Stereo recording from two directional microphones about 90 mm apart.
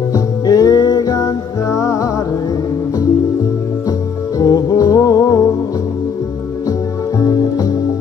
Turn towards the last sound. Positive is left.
turn(degrees=40)  # may be behind; listen again after turning